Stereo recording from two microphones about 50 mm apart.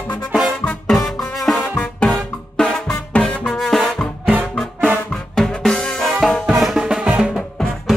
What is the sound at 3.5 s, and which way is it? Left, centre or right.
Music, centre.